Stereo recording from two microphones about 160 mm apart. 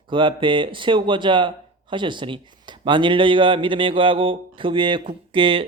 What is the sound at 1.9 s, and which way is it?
Speech, 30° right (ahead or behind).